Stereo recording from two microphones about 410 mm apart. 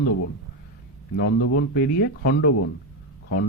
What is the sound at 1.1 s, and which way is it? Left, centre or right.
Speech, left.